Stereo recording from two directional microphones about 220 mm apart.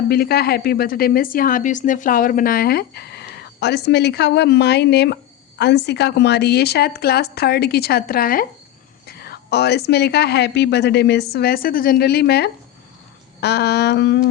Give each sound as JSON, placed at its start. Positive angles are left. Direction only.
{"t": 0.1, "sound": "a woman's voice", "side_deg": 45}